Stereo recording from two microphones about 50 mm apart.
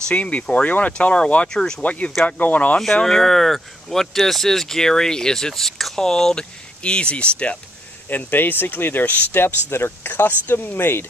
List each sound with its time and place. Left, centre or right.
0.1 s speech: left
1.5 s speech: centre
1.8 s speech: left
3.0 s speech: centre
6.8 s speech: left
8.1 s speech: left
9.3 s speech: left